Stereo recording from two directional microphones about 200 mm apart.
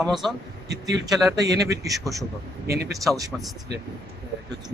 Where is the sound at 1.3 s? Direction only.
20° right (ahead or behind).